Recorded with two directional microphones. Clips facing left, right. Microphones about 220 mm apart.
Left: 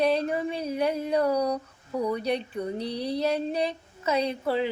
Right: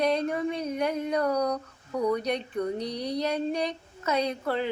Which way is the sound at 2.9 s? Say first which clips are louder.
Left 2 dB; 30° left (ahead or behind).